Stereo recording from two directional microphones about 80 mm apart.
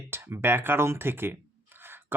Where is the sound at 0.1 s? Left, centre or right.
Right.